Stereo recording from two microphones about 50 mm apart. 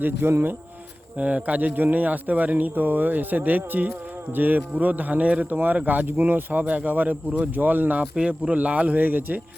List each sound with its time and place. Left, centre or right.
0.0 s speech: right
1.2 s speech: right
8.1 s speech: right